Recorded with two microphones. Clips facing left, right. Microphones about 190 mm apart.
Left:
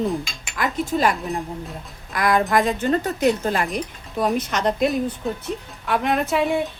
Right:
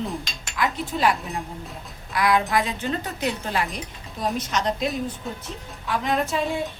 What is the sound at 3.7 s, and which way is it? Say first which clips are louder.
Speech: left 9 dB; 55° left (ahead or behind).